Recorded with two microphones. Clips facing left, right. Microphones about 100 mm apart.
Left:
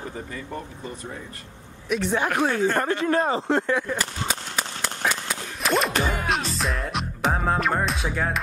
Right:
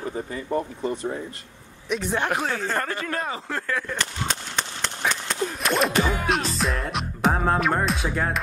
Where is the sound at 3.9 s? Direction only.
5° left (ahead or behind).